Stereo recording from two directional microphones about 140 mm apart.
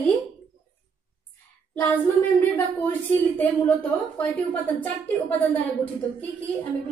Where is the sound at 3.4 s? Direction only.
10° left (ahead or behind).